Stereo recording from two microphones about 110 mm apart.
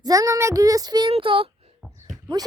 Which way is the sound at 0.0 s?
30° right (ahead or behind).